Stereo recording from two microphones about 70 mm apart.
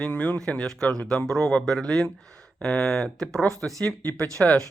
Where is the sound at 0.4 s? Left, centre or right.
Centre.